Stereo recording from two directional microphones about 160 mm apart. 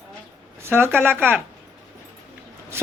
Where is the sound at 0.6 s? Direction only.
15° right (ahead or behind).